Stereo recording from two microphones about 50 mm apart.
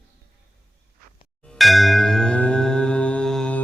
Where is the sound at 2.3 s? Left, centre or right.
Left.